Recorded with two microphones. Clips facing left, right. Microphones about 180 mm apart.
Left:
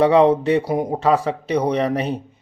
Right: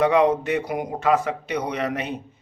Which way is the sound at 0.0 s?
30° left (ahead or behind).